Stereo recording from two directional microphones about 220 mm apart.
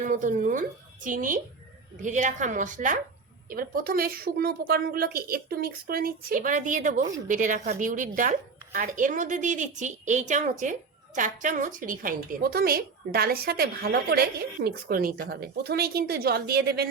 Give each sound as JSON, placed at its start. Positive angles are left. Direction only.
{"t": 0.0, "sound": "a woman's voice", "side_deg": -35}